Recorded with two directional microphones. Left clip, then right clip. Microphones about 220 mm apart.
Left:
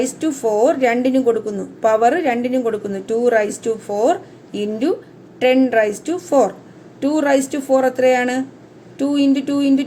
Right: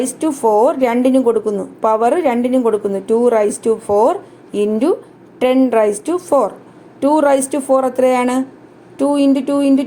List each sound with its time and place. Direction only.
0.0 s a woman's voice: 20° right (ahead or behind)